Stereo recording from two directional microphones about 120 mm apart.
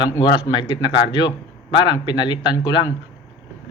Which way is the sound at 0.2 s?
35° left (ahead or behind).